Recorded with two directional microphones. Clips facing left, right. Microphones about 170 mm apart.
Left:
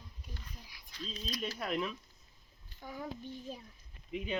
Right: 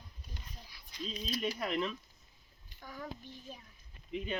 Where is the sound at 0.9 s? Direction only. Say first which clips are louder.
Right 3 dB; 15° right (ahead or behind).